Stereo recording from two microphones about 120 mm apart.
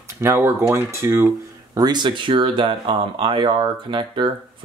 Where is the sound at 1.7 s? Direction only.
35° right (ahead or behind).